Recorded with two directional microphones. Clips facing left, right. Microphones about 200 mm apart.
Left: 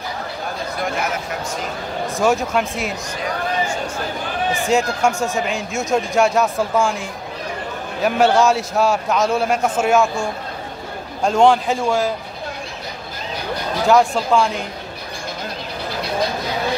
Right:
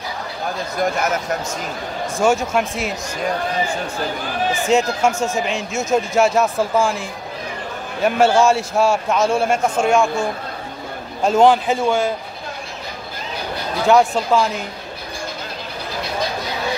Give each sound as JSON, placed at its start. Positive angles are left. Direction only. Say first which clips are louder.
{"t": 0.7, "sound": "speech", "louder": "right 4 dB", "side_deg": -45}
{"t": 2.1, "sound": "speech", "louder": "right 1 dB", "side_deg": 0}
{"t": 4.6, "sound": "speech", "louder": "right 1 dB", "side_deg": 0}
{"t": 13.8, "sound": "speech", "louder": "right 1 dB", "side_deg": 0}